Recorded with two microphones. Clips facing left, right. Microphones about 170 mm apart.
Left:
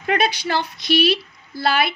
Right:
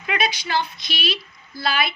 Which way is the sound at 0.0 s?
50° left (ahead or behind).